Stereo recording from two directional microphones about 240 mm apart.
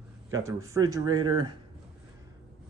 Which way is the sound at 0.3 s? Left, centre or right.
Centre.